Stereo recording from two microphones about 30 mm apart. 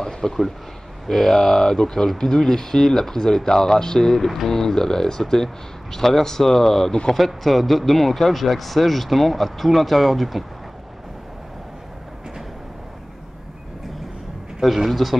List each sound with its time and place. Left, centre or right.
0.0 s a sound: centre
1.0 s speech: centre
7.2 s speech: centre
14.6 s speech: centre